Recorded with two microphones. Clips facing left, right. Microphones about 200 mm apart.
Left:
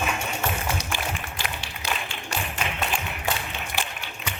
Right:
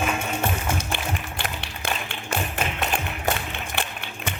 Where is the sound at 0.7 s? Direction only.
55° right (ahead or behind).